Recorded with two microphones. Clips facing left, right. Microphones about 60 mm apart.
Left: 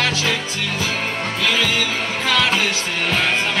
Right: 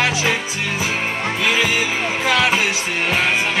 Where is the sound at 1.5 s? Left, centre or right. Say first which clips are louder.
Right 1 dB; centre.